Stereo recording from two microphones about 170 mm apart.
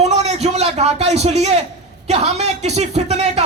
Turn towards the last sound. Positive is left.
turn(degrees=-40)  # may be behind; listen again after turning